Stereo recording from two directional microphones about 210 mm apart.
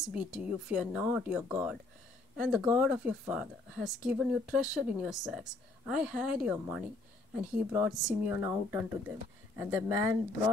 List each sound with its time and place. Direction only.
0.1 s speech: 5° right (ahead or behind)